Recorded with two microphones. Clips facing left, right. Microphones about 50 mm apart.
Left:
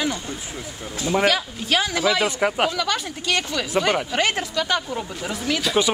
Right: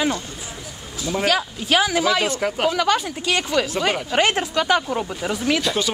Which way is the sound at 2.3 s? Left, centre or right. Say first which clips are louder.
Left 2 dB; centre.